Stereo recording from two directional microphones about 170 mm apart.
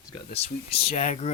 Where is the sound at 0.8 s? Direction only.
40° left (ahead or behind).